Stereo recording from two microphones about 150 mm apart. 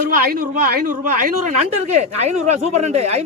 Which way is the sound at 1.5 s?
50° right (ahead or behind).